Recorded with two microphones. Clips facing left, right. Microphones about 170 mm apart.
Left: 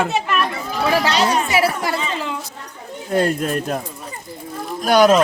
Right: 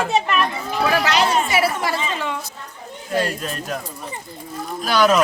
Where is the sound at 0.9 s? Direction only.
30° left (ahead or behind).